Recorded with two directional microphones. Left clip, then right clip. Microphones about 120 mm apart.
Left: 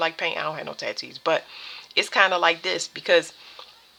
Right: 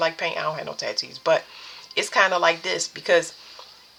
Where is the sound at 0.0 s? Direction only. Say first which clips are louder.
Right 1 dB; 35° left (ahead or behind).